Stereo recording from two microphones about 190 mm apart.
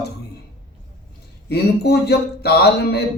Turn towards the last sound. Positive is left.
turn(degrees=60)  # may be behind; listen again after turning